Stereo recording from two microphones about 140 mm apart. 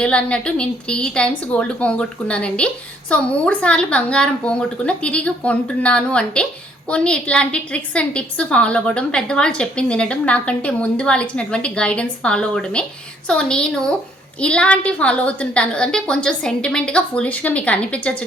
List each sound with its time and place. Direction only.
0.0 s a woman's voice: 10° left (ahead or behind)